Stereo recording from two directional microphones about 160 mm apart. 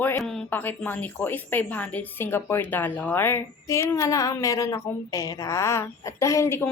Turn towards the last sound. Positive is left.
turn(degrees=15)  # may be behind; listen again after turning